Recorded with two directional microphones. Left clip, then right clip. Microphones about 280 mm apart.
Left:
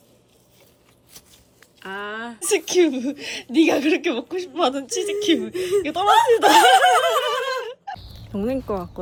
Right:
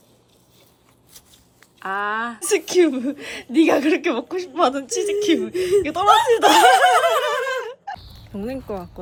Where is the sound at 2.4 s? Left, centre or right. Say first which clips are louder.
Even; centre.